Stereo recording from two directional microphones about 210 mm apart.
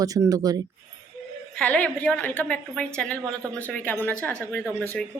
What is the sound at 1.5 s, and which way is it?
A woman's voice, 5° left (ahead or behind).